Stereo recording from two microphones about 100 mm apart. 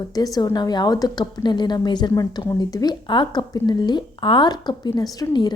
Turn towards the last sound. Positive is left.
turn(degrees=45)  # may be behind; listen again after turning